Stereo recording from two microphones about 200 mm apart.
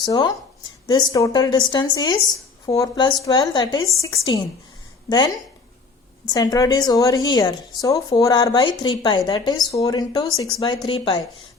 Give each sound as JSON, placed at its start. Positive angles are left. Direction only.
{"t": 0.0, "sound": "speech", "side_deg": 20}
{"t": 6.3, "sound": "speech", "side_deg": 20}